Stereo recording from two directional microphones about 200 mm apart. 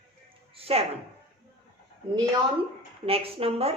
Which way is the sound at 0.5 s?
30° right (ahead or behind).